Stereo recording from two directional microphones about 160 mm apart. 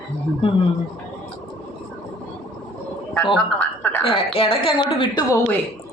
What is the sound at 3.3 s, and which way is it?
Speech, 10° left (ahead or behind).